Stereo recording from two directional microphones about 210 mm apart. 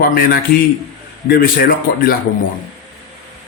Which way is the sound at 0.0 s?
45° left (ahead or behind).